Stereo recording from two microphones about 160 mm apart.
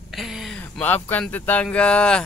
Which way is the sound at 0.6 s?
10° left (ahead or behind).